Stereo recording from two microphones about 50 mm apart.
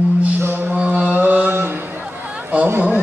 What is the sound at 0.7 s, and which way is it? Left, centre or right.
Mantra, right.